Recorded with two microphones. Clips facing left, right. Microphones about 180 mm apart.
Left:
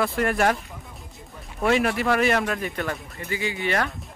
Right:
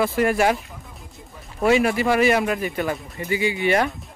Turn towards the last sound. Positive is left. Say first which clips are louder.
# right 5 dB
turn(degrees=-15)  # may be behind; listen again after turning